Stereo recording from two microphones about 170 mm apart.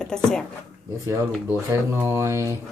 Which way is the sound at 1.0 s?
15° right (ahead or behind).